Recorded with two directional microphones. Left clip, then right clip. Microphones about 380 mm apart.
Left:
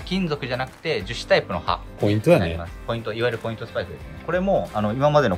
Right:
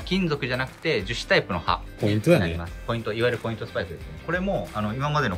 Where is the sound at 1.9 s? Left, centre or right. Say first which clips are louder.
Left 4 dB; centre.